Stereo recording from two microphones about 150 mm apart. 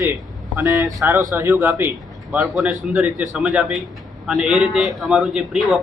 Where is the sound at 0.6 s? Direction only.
20° right (ahead or behind); by 5.8 s 5° right (ahead or behind).